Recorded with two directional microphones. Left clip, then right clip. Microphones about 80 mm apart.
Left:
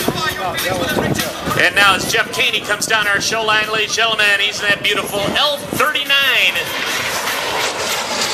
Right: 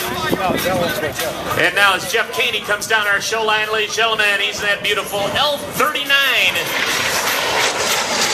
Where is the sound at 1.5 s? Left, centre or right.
Left.